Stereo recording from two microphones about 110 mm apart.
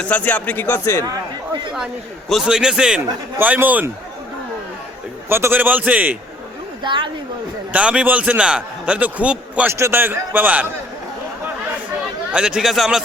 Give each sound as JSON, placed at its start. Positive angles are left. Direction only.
{"t": 0.0, "sound": "speech", "side_deg": 15}
{"t": 1.0, "sound": "speech", "side_deg": -35}
{"t": 2.3, "sound": "a man's voice", "side_deg": -5}
{"t": 5.3, "sound": "a man's voice", "side_deg": -20}
{"t": 6.8, "sound": "a woman's voice", "side_deg": -50}
{"t": 7.7, "sound": "a man's voice", "side_deg": -10}
{"t": 9.6, "sound": "a man's voice", "side_deg": -25}
{"t": 12.3, "sound": "speech", "side_deg": -5}